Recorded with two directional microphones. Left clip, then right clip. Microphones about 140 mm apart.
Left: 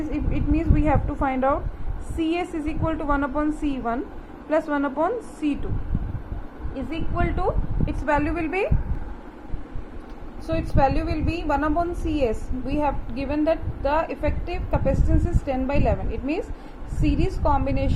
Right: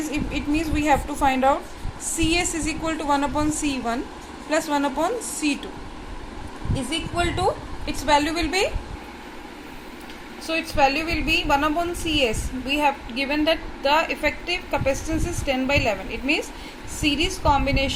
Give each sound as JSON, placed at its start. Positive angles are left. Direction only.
{"t": 0.1, "sound": "a woman's voice", "side_deg": -10}
{"t": 6.9, "sound": "speech", "side_deg": -35}
{"t": 7.9, "sound": "a woman's voice", "side_deg": -25}
{"t": 10.4, "sound": "a woman's voice", "side_deg": -5}